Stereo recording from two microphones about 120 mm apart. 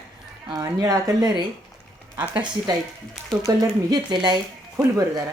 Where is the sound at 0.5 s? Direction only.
30° right (ahead or behind).